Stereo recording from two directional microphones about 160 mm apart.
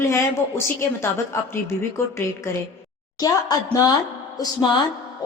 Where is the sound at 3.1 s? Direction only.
20° left (ahead or behind).